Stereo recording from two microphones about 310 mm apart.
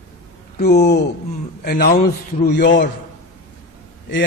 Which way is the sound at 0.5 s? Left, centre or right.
Left.